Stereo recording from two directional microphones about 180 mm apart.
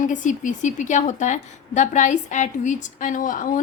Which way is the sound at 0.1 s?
45° left (ahead or behind).